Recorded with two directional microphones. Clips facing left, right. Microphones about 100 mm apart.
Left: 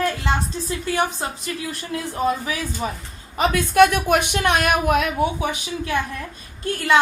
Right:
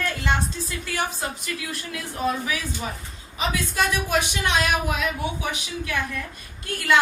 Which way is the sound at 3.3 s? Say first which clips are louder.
Left 9 dB; 55° left (ahead or behind).